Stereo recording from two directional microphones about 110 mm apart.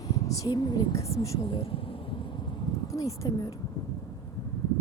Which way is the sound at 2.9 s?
30° left (ahead or behind).